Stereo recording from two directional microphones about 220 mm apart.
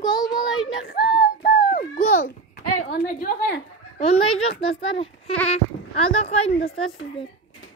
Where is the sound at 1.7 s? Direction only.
40° left (ahead or behind).